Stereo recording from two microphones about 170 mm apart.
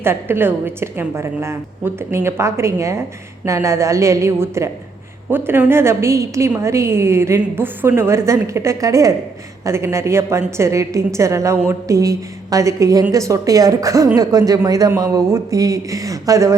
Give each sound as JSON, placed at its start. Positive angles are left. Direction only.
{"t": 0.0, "sound": "a woman's voice", "side_deg": -15}